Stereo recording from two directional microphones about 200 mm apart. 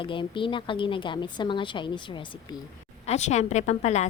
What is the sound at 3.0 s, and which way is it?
A woman's voice, 35° left (ahead or behind).